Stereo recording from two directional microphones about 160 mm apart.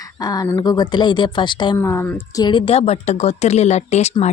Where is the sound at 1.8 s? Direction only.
15° left (ahead or behind).